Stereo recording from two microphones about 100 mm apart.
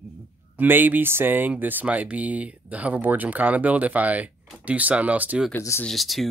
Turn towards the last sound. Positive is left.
turn(degrees=0)  # may be behind; listen again after turning